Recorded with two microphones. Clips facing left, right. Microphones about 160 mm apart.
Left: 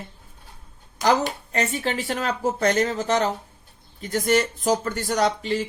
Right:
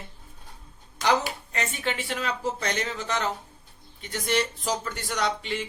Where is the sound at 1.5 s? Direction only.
35° left (ahead or behind).